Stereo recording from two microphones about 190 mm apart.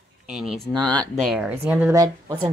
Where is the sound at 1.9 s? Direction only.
20° right (ahead or behind).